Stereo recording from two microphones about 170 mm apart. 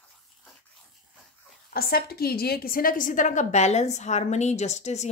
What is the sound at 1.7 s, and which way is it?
A woman's voice, 65° left (ahead or behind).